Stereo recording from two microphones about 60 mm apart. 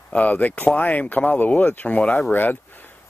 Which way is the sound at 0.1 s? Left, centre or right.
Left.